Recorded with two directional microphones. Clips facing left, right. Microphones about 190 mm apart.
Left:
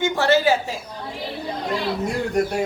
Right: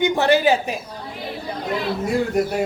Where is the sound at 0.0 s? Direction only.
15° right (ahead or behind).